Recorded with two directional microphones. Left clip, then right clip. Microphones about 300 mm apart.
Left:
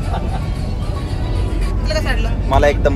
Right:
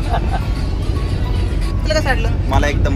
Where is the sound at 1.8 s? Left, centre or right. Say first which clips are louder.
Right 4 dB; centre.